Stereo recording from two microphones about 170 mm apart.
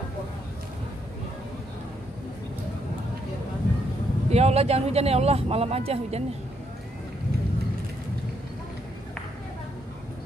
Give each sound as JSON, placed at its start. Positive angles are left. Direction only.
{"t": 4.3, "sound": "speech", "side_deg": -40}